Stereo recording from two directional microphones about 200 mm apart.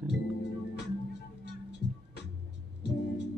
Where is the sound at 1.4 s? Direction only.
60° left (ahead or behind).